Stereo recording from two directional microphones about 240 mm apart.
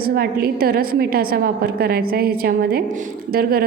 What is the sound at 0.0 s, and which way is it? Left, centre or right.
A woman's voice, right.